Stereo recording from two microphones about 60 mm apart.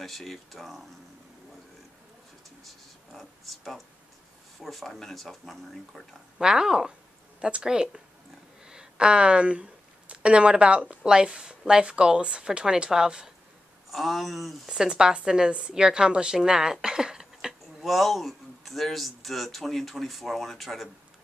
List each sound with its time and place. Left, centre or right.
0.0 s speech: centre
2.6 s a sound: centre
4.6 s speech: centre
6.4 s a woman's voice: centre
13.8 s speech: centre